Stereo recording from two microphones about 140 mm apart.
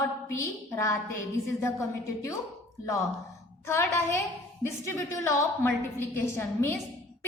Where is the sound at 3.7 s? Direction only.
20° left (ahead or behind).